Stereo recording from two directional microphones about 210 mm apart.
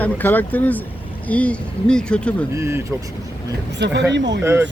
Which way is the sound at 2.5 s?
10° right (ahead or behind).